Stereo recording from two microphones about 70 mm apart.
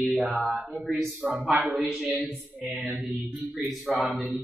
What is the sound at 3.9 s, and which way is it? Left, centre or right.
Speech, centre.